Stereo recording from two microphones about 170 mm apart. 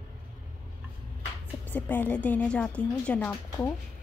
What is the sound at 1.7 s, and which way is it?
A woman's voice, 10° left (ahead or behind).